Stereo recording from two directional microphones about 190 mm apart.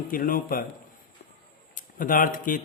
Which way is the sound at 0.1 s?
45° left (ahead or behind).